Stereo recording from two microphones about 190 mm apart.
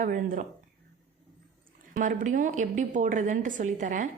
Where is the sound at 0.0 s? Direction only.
45° right (ahead or behind).